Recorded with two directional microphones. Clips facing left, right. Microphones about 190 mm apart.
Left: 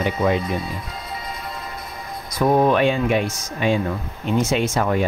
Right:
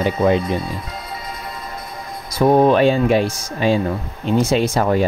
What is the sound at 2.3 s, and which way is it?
Speech, 30° right (ahead or behind).